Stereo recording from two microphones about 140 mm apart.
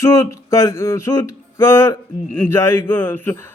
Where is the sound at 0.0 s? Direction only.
20° left (ahead or behind).